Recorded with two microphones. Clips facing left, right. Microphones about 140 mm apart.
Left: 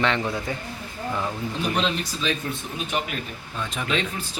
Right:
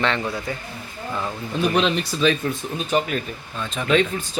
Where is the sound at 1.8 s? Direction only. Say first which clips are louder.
Right 6 dB; 60° right (ahead or behind).